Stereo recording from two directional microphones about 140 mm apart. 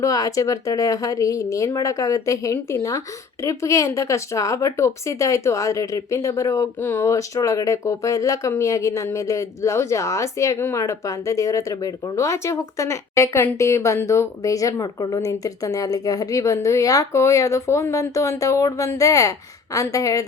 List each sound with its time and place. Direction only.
0.0 s speech: 25° left (ahead or behind)